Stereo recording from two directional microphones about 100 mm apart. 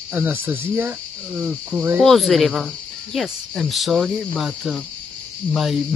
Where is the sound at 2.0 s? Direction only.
Centre (ahead or behind).